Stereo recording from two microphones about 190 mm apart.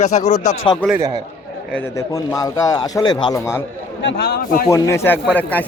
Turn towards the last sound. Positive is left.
turn(degrees=10)  # may be behind; listen again after turning